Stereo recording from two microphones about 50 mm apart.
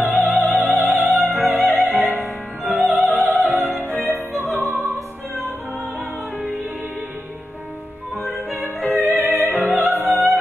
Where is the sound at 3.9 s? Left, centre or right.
Right.